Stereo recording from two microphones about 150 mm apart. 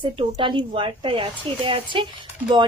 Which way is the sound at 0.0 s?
35° right (ahead or behind).